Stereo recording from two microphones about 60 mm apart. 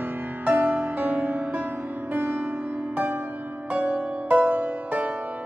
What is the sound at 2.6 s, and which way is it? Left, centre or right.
Music, right.